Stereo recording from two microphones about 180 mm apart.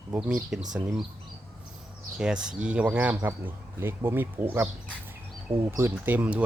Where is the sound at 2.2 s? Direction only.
5° right (ahead or behind).